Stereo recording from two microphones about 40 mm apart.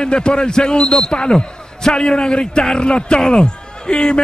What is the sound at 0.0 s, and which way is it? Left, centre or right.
A man's voice, left.